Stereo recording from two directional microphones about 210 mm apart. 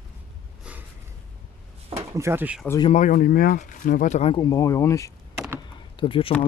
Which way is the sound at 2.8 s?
35° left (ahead or behind).